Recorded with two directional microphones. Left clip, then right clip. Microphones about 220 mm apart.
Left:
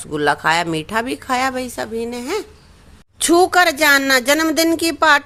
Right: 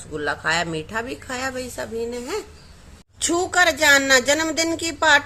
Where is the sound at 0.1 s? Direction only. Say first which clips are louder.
Left 7 dB; 45° left (ahead or behind).